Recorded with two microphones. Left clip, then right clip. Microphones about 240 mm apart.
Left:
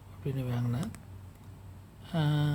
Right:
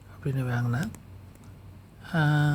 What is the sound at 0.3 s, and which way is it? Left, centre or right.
Speech, centre.